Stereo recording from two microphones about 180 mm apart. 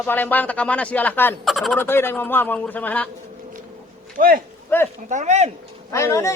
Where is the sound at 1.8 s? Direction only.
10° left (ahead or behind).